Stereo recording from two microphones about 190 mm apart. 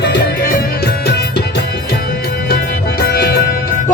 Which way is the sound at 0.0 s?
60° left (ahead or behind).